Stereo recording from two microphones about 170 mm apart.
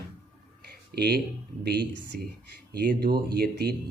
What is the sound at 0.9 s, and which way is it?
Speech, 70° right (ahead or behind).